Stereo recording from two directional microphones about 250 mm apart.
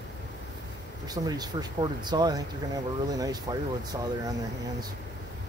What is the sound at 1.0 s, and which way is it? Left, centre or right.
Speech, centre.